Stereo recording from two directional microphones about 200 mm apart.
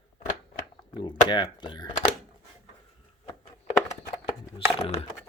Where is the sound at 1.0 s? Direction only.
25° left (ahead or behind).